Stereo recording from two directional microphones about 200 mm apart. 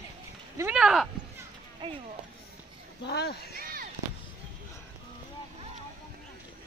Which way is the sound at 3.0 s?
55° left (ahead or behind).